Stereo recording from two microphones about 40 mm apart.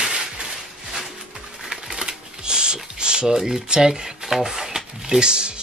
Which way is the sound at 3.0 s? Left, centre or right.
Centre.